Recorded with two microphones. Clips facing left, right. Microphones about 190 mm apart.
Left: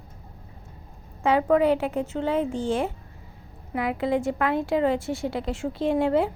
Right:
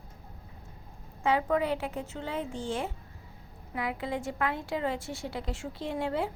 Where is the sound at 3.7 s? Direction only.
80° left.